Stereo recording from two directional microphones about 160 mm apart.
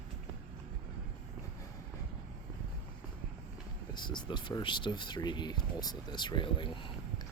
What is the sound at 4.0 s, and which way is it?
Speech, 30° left (ahead or behind).